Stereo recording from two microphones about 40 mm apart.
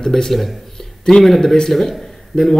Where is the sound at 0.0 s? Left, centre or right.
Centre.